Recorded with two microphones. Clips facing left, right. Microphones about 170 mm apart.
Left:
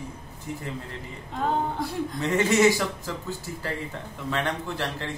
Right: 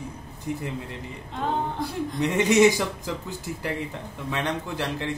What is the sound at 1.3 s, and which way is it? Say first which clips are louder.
Speech: left 1 dB; centre (ahead or behind).